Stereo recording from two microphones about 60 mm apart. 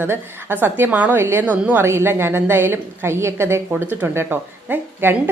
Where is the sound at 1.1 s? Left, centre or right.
Right.